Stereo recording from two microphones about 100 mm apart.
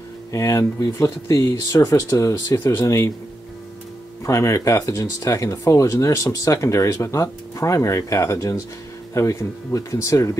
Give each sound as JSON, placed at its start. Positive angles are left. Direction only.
{"t": 0.3, "sound": "speech", "side_deg": 30}
{"t": 4.2, "sound": "speech", "side_deg": 30}